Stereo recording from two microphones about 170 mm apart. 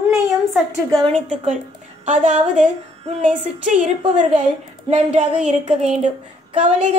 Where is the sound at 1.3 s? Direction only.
40° right (ahead or behind).